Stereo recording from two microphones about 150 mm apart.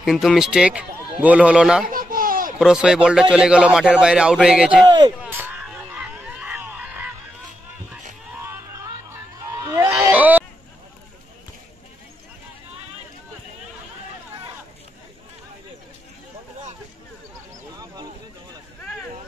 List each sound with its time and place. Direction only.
0.0 s a man's voice: centre (ahead or behind)
1.9 s baby laughter: 70° right (ahead or behind)
2.6 s a man's voice: 5° right (ahead or behind)
5.2 s a sound: 10° right (ahead or behind)
8.5 s music: 20° right (ahead or behind)
10.0 s a sound: 10° right (ahead or behind)